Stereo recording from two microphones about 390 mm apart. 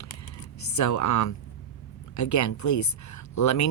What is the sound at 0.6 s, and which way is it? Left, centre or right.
Speech, left.